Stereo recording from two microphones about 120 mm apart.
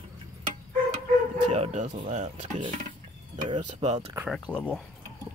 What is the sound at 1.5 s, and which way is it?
Speech, 85° right.